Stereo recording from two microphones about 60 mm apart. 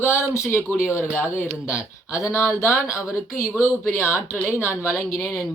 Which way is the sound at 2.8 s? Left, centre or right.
Left.